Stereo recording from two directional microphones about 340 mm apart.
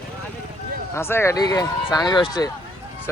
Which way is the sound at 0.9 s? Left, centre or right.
Centre.